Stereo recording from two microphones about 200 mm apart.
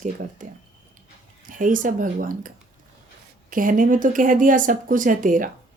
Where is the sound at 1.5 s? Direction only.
40° right (ahead or behind).